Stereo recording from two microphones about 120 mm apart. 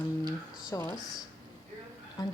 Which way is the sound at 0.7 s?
30° left (ahead or behind).